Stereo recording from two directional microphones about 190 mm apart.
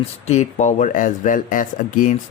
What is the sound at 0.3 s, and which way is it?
Speech, 35° left (ahead or behind).